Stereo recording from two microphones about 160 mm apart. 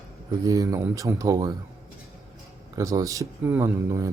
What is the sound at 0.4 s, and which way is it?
Speech, 20° right (ahead or behind).